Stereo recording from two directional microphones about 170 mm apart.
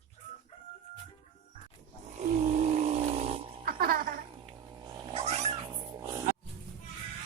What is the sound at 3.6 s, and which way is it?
Music, 60° right (ahead or behind).